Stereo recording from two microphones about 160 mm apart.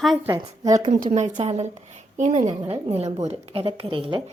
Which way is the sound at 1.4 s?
40° right (ahead or behind).